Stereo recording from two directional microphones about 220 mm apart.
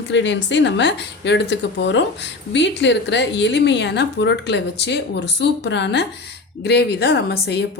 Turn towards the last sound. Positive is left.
turn(degrees=50)  # may be behind; listen again after turning